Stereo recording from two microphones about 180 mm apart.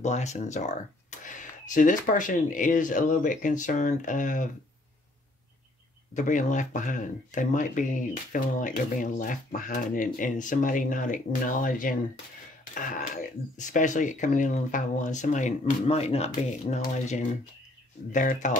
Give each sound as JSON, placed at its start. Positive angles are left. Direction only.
{"t": 0.0, "sound": "speech", "side_deg": 40}
{"t": 6.1, "sound": "speech", "side_deg": 45}
{"t": 13.6, "sound": "speech", "side_deg": 45}